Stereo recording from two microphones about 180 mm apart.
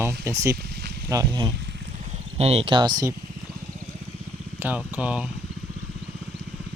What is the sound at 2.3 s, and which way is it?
Speech, 35° right (ahead or behind).